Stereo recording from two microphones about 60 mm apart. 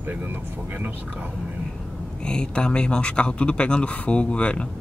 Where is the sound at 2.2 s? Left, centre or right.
Centre.